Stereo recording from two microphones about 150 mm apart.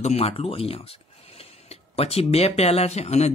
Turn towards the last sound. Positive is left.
turn(degrees=45)  # may be behind; listen again after turning